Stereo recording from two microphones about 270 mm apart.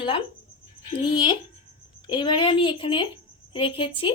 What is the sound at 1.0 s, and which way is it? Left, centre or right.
A woman's voice, centre.